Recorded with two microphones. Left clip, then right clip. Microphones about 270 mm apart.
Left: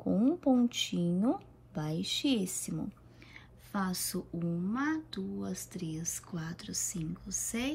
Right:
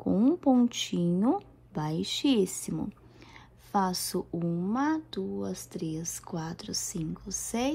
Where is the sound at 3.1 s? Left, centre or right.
Centre.